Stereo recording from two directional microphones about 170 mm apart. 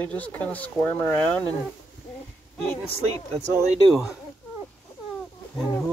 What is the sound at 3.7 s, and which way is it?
Speech, 5° right (ahead or behind).